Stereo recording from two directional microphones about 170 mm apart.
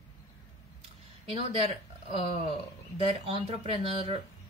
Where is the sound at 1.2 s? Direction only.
35° right (ahead or behind).